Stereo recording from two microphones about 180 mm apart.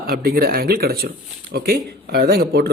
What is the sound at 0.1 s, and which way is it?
Speech, 55° right (ahead or behind).